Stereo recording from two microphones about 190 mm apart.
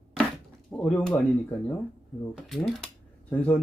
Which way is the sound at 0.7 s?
5° left (ahead or behind).